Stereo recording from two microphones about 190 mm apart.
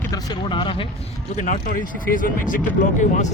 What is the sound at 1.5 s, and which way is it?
Speech, 45° left (ahead or behind).